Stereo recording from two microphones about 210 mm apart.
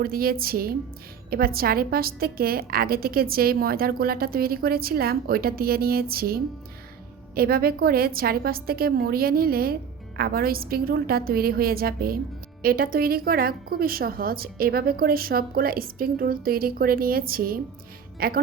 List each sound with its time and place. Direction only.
0.0 s a woman's voice: 45° right (ahead or behind)